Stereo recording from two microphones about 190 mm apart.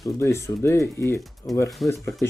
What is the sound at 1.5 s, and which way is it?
Speech, centre (ahead or behind).